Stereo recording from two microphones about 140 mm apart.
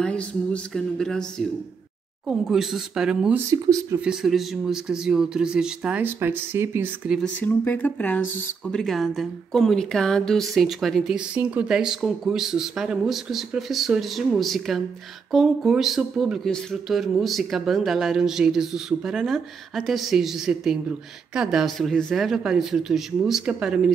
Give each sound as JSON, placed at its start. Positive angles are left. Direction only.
{"t": 0.0, "sound": "a woman's voice", "side_deg": 5}
{"t": 2.2, "sound": "a woman's voice", "side_deg": -5}
{"t": 3.3, "sound": "speech", "side_deg": -25}
{"t": 4.0, "sound": "a woman's voice", "side_deg": -5}
{"t": 7.3, "sound": "a woman's voice", "side_deg": 10}